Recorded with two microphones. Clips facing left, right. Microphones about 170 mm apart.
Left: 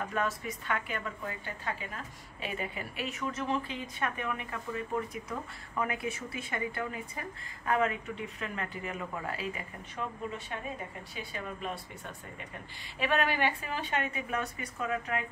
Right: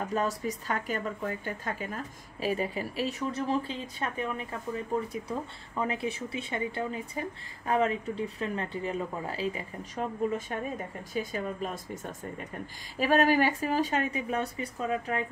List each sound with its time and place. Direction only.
0.1 s speech: 35° right (ahead or behind)
10.5 s speech: 40° right (ahead or behind)